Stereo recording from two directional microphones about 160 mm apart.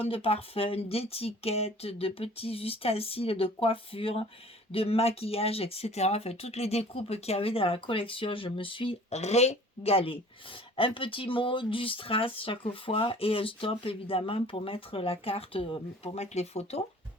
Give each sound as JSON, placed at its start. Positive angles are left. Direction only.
{"t": 0.0, "sound": "speech", "side_deg": 35}